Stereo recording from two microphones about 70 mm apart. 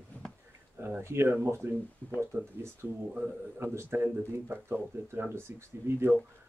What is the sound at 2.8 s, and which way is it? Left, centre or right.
Speech, right.